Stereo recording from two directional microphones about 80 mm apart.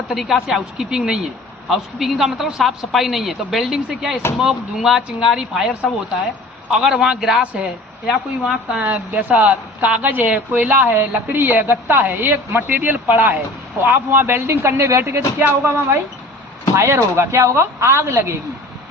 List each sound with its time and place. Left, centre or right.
0.1 s a man's voice: centre
8.9 s speech: centre; by 18.3 s right